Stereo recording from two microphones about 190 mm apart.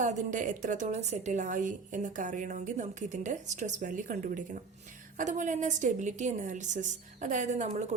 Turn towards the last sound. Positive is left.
turn(degrees=-40)  # may be behind; listen again after turning